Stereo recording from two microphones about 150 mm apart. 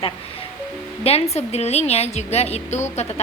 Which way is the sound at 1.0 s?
45° left (ahead or behind).